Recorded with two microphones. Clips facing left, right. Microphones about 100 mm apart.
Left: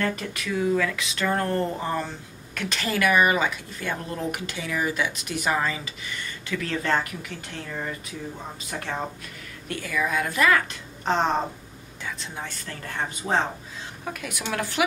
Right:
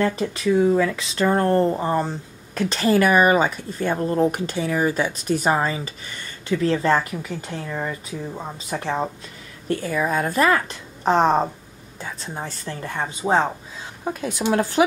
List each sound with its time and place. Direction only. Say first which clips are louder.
0.2 s speech: right 8 dB; 30° right (ahead or behind)
7.2 s speech: right 6 dB; 10° right (ahead or behind)
8.6 s speech: right 6 dB; 30° right (ahead or behind)
12.9 s speech: right 5 dB; 15° right (ahead or behind)
14.0 s speech: right 9 dB; 30° right (ahead or behind)